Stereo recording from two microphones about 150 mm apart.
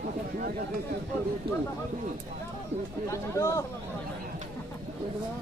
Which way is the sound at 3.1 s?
20° left (ahead or behind).